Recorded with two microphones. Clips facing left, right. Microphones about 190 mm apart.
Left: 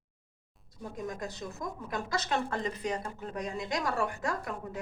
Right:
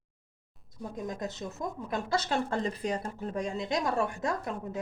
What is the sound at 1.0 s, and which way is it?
Speech, 20° right (ahead or behind).